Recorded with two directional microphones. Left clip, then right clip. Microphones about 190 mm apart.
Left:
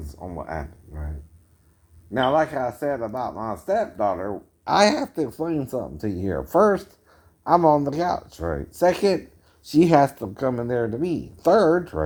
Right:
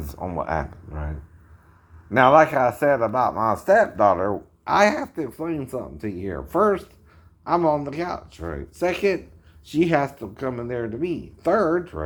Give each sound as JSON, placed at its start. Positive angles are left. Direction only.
{"t": 0.2, "sound": "speech", "side_deg": -30}
{"t": 0.4, "sound": "speech", "side_deg": -20}
{"t": 2.1, "sound": "speech", "side_deg": -15}
{"t": 4.6, "sound": "speech", "side_deg": 55}
{"t": 7.4, "sound": "speech", "side_deg": 60}